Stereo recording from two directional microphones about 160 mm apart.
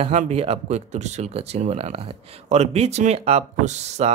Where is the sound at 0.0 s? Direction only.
40° right (ahead or behind).